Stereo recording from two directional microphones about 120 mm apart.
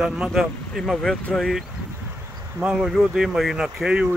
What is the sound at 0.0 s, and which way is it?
Speech, 5° right (ahead or behind).